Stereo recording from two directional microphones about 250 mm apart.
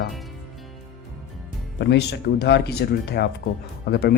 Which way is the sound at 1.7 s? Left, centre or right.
Left.